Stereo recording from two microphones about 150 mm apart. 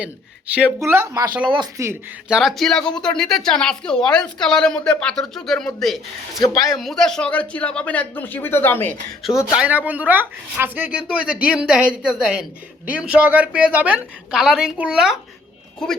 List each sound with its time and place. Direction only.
0.0 s speech: 10° right (ahead or behind)
1.5 s speech: 30° right (ahead or behind)
2.3 s a woman's voice: centre (ahead or behind)
6.4 s a man's voice: 25° left (ahead or behind)
6.7 s speech: centre (ahead or behind)
9.5 s speech: 10° right (ahead or behind)